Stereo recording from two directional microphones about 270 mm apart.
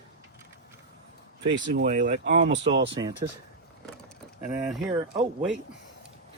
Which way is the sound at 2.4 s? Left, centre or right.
Right.